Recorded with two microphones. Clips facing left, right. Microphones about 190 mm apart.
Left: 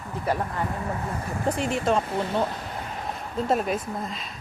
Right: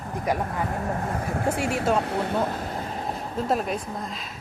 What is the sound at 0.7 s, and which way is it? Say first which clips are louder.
Speech: right 2 dB; 45° right (ahead or behind).